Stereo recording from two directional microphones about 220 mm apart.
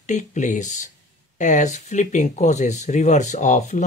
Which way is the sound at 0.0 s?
35° left (ahead or behind).